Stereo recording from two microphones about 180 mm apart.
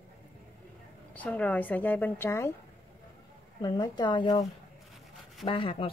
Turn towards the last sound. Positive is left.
turn(degrees=30)  # may be behind; listen again after turning